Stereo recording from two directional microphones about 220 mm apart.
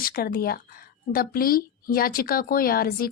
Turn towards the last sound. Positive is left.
turn(degrees=40)  # may be behind; listen again after turning